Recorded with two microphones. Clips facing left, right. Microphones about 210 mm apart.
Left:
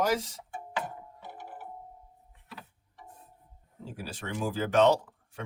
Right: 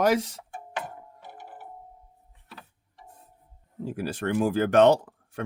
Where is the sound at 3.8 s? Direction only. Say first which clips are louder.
Right 10 dB; 60° right (ahead or behind).